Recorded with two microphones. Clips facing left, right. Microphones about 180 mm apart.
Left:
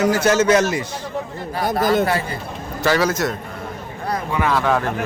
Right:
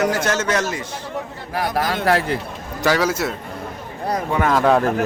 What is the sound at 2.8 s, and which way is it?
Speech, 10° right (ahead or behind).